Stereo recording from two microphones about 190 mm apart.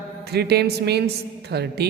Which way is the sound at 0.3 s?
60° right (ahead or behind).